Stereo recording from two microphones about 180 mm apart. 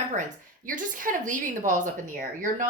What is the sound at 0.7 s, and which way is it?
A woman's voice, 45° right (ahead or behind).